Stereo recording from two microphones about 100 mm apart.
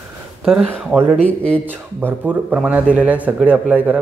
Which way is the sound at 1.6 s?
20° right (ahead or behind).